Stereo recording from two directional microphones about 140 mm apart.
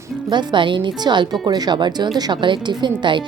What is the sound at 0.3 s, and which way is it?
Speech, 35° right (ahead or behind).